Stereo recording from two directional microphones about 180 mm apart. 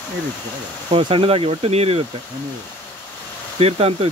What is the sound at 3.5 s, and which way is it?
Speech, 35° right (ahead or behind).